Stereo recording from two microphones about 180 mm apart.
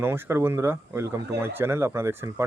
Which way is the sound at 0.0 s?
15° right (ahead or behind).